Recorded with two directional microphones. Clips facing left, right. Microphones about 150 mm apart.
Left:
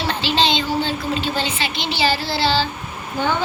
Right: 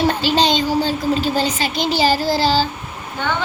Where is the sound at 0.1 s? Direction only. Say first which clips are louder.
Right 3 dB; 45° right (ahead or behind).